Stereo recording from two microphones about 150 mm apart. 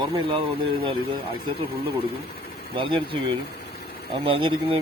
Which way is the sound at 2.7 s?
35° right (ahead or behind).